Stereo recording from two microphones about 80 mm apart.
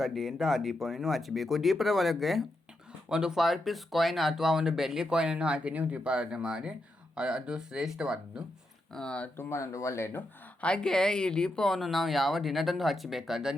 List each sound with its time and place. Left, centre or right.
0.0 s speech: centre
8.9 s speech: centre
9.4 s speech: left
10.6 s speech: centre